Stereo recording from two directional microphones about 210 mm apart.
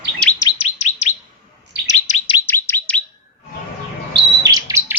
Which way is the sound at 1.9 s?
35° left (ahead or behind).